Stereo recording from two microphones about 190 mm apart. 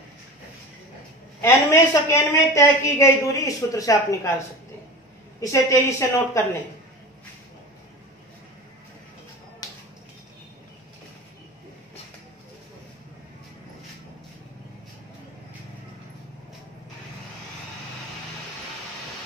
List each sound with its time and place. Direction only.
1.4 s a woman's voice: 15° left (ahead or behind)
5.4 s a woman's voice: 15° left (ahead or behind)